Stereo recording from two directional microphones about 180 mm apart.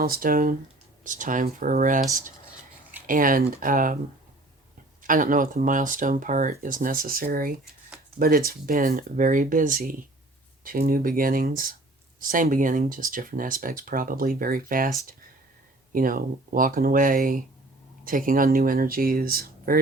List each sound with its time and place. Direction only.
0.0 s speech: 55° right (ahead or behind)
3.1 s speech: 50° right (ahead or behind)
5.0 s speech: 50° right (ahead or behind)